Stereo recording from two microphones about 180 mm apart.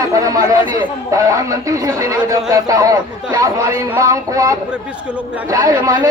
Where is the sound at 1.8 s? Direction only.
20° right (ahead or behind).